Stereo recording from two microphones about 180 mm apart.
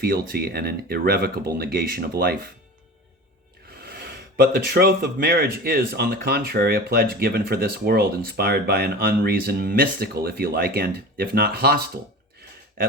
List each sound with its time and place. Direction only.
0.0 s speech: 55° right (ahead or behind)
3.7 s speech: 55° right (ahead or behind)